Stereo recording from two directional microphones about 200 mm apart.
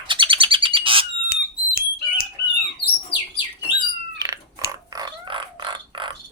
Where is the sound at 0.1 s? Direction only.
25° right (ahead or behind).